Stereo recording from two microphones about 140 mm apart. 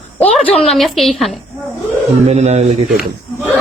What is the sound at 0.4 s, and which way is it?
Speech, 5° left (ahead or behind).